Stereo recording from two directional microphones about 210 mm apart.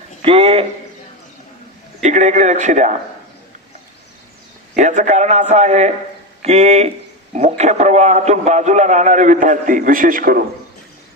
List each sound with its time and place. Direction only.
0.2 s a man's voice: 25° right (ahead or behind)
2.0 s a man's voice: 35° right (ahead or behind)
4.7 s a man's voice: 35° right (ahead or behind)